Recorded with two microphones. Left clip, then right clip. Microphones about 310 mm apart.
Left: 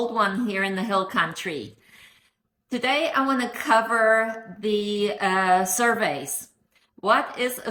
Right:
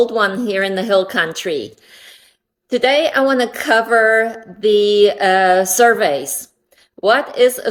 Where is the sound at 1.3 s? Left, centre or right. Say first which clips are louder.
Right 10 dB; right.